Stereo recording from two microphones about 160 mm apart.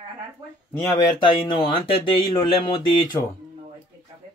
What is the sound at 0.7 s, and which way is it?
Speech, 15° left (ahead or behind).